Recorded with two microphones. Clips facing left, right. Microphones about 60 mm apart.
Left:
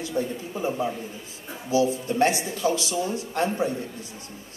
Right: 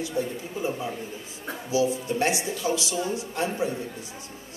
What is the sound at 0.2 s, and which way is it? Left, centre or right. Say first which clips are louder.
A woman's voice: left 2 dB; left.